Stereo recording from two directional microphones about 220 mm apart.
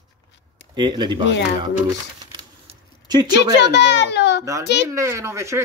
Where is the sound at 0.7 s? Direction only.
20° right (ahead or behind).